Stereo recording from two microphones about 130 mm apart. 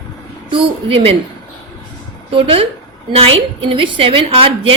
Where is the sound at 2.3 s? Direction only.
45° right (ahead or behind).